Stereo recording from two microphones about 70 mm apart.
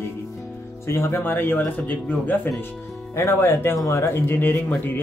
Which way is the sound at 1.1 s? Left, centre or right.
Left.